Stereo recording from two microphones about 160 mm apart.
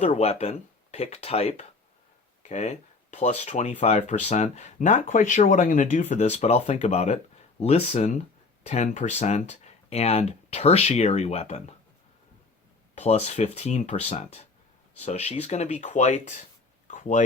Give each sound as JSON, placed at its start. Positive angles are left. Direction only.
{"t": 0.0, "sound": "speech", "side_deg": 40}
{"t": 13.0, "sound": "speech", "side_deg": 40}
{"t": 16.9, "sound": "a sound", "side_deg": 50}